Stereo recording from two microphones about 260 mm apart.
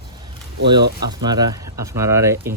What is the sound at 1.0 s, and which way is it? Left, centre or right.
Speech, centre.